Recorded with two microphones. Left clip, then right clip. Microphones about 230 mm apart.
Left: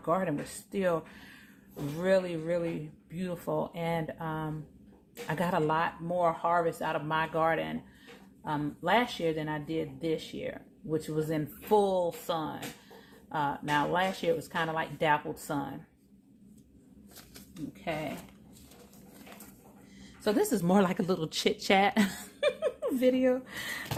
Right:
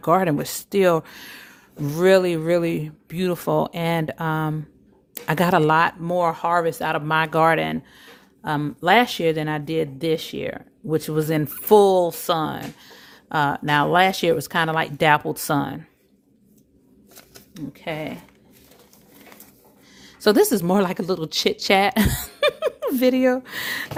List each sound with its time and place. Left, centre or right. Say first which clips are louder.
0.0 s speech: right 11 dB; right
17.5 s speech: right 6 dB; right
20.2 s speech: right 11 dB; right